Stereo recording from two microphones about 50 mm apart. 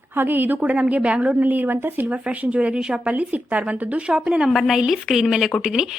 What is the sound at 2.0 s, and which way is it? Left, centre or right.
A woman's voice, right.